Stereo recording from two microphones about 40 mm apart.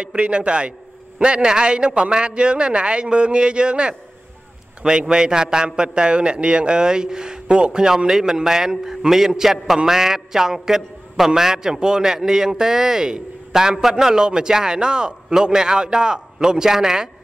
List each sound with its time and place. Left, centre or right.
0.0 s a man's voice: right